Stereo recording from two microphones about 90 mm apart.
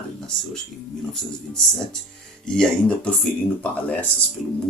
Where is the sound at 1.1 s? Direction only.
5° left (ahead or behind).